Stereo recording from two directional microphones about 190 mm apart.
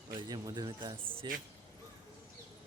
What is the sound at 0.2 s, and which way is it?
Speech, 20° right (ahead or behind).